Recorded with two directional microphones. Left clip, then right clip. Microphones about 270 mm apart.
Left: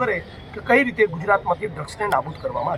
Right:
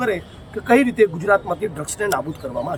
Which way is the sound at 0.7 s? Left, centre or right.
Centre.